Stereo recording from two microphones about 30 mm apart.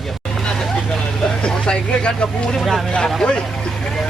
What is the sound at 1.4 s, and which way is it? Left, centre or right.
Vehicle, left.